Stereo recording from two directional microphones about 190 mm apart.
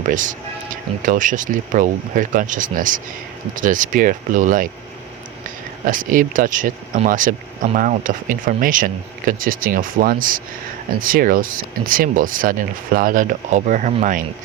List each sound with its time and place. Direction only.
0.1 s speech: 45° right (ahead or behind)
5.8 s speech: 45° right (ahead or behind)